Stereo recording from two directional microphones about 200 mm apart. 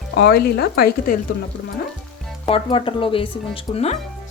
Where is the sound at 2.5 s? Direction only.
25° left (ahead or behind).